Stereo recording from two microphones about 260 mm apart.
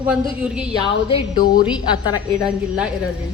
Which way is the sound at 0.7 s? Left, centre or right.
Centre.